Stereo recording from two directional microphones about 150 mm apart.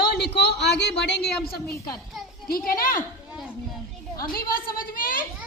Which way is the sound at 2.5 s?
75° left (ahead or behind).